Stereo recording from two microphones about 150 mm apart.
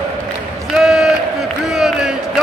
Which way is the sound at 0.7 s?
Centre (ahead or behind).